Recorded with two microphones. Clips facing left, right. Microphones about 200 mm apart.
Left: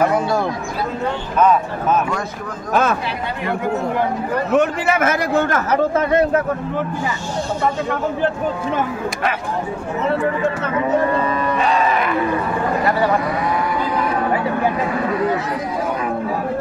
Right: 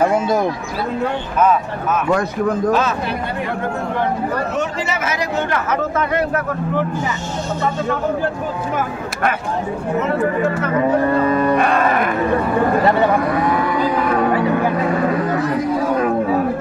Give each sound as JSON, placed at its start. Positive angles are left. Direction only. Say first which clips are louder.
{"t": 0.0, "sound": "speech", "louder": "right 1 dB", "side_deg": -20}
{"t": 2.7, "sound": "a man's voice", "louder": "even", "side_deg": 50}
{"t": 4.6, "sound": "a man's voice", "louder": "left 5 dB", "side_deg": 55}
{"t": 5.7, "sound": "speech", "louder": "left 3 dB", "side_deg": 25}
{"t": 11.5, "sound": "cattle", "louder": "right 2 dB", "side_deg": -55}
{"t": 12.8, "sound": "speech", "louder": "right 1 dB", "side_deg": -25}